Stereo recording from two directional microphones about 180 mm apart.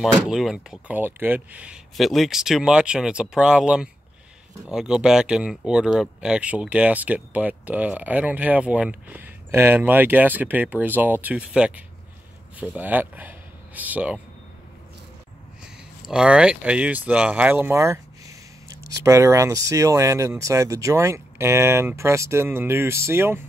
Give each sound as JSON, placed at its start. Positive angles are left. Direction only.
{"t": 0.0, "sound": "speech", "side_deg": 0}
{"t": 16.0, "sound": "speech", "side_deg": -5}